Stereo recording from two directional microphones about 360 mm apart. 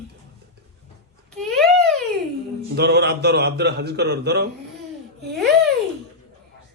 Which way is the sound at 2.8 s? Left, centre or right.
Right.